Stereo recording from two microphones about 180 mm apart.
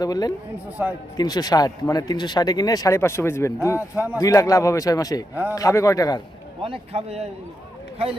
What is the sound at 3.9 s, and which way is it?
Speech, 10° right (ahead or behind).